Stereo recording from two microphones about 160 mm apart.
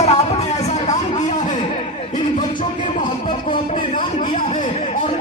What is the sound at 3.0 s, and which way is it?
A man's voice, 30° left (ahead or behind).